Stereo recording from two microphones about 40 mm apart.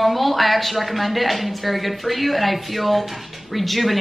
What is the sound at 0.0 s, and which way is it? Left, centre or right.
A woman's voice, centre.